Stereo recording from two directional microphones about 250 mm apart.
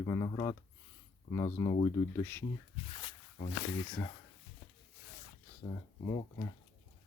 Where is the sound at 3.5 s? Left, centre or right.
Left.